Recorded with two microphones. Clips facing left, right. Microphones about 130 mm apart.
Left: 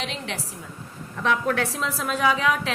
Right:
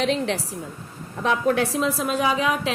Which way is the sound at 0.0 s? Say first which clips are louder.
Right 9 dB; 40° right (ahead or behind).